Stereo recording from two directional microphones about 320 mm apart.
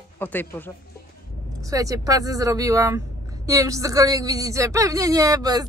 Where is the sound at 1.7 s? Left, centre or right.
Centre.